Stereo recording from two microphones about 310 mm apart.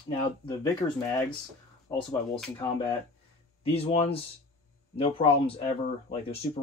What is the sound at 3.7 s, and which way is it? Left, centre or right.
Speech, centre.